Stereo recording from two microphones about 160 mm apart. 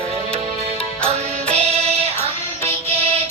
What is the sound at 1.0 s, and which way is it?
Music, 40° right (ahead or behind).